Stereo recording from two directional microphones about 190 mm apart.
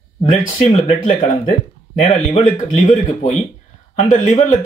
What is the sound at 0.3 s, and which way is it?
Speech, 35° left (ahead or behind).